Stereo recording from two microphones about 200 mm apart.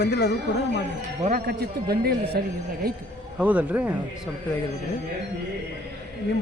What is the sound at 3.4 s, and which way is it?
Speech, 5° right (ahead or behind).